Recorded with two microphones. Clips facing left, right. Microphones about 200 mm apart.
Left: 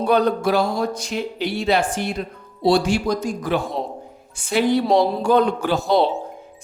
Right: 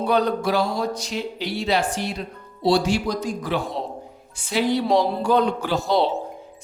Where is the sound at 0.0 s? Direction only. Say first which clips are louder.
Left 3 dB; 50° left (ahead or behind).